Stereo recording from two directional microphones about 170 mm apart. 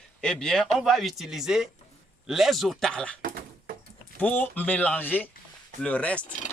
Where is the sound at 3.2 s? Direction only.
55° right (ahead or behind).